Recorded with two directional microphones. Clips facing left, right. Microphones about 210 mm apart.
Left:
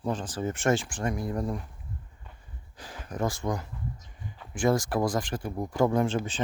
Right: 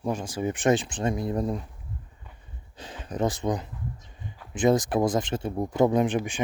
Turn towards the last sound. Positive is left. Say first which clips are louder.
# right 3 dB
turn(degrees=-15)  # may be behind; listen again after turning